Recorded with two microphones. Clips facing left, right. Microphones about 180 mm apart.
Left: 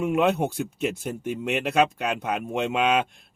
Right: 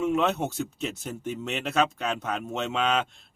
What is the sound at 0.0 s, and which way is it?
A man's voice, 10° left (ahead or behind).